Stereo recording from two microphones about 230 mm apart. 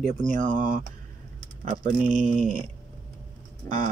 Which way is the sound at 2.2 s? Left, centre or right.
Centre.